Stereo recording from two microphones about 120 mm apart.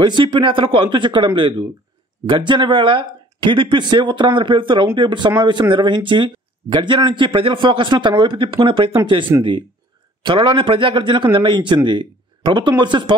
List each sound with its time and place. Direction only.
0.0 s speech: 45° right (ahead or behind)